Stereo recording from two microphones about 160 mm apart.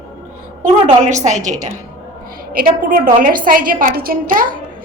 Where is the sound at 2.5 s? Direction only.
60° right (ahead or behind).